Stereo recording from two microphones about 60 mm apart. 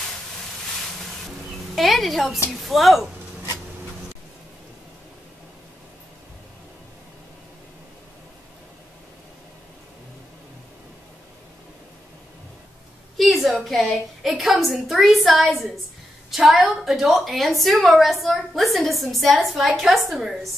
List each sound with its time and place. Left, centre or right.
1.8 s a woman's voice: centre
13.2 s a sound: centre
13.6 s a woman's voice: centre